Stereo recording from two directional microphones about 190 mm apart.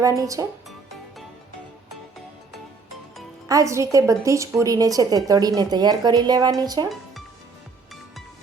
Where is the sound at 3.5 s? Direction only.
15° right (ahead or behind).